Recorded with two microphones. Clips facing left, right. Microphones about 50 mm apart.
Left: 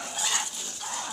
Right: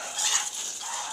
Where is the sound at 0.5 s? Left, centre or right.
Centre.